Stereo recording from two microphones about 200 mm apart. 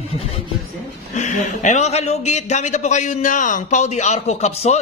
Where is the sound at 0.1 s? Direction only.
30° left (ahead or behind).